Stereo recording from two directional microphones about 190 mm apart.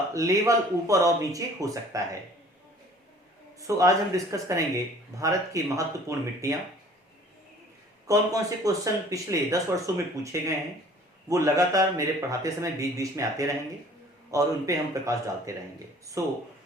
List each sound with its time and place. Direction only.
0.1 s speech: 15° right (ahead or behind)
3.6 s speech: 15° right (ahead or behind)
8.0 s speech: 15° right (ahead or behind)